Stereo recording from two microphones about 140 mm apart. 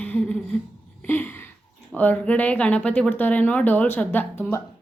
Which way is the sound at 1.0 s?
15° left (ahead or behind).